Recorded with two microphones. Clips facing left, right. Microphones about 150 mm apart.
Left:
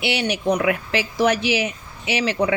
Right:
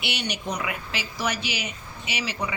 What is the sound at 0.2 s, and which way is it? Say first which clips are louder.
A woman's voice: left 10 dB; 60° left (ahead or behind).